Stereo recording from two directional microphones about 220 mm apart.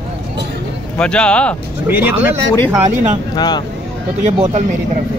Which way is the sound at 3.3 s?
20° left (ahead or behind).